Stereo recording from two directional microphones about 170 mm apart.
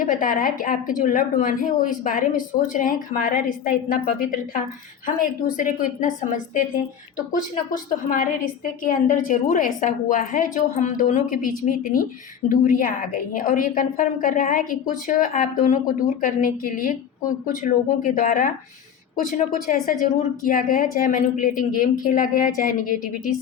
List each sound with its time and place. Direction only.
0.0 s a woman's voice: 55° left (ahead or behind)